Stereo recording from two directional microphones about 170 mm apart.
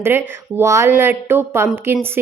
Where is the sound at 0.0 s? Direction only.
15° right (ahead or behind).